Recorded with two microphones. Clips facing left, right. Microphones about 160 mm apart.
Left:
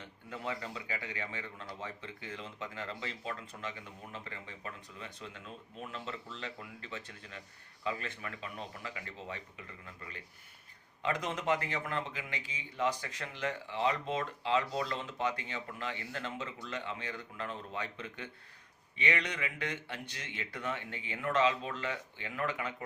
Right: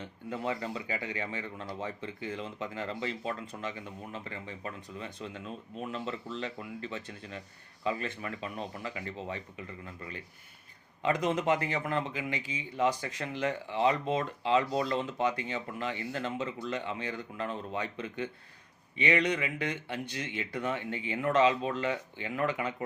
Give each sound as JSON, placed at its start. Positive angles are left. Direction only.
{"t": 0.3, "sound": "a man's voice", "side_deg": -25}
{"t": 11.0, "sound": "speech", "side_deg": -15}